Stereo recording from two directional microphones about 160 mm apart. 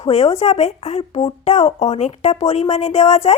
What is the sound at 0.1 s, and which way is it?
A woman's voice, 40° left (ahead or behind).